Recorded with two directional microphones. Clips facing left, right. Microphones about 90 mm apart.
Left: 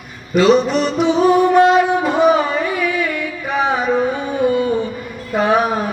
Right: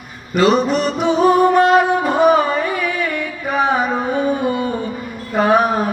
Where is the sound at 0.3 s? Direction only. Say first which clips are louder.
Left 2 dB; 45° right (ahead or behind).